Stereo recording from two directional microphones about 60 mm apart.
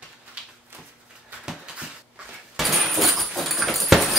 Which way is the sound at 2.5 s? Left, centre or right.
Centre.